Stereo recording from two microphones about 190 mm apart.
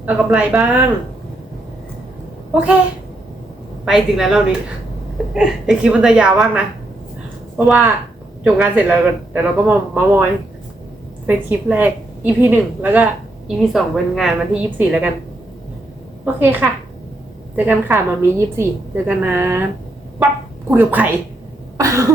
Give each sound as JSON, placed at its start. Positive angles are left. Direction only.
{"t": 0.0, "sound": "a woman's voice", "side_deg": -5}
{"t": 3.8, "sound": "a woman's voice", "side_deg": 0}
{"t": 11.3, "sound": "a woman's voice", "side_deg": -10}
{"t": 16.2, "sound": "a woman's voice", "side_deg": -10}
{"t": 17.7, "sound": "a woman's voice", "side_deg": -15}
{"t": 21.8, "sound": "cough", "side_deg": -15}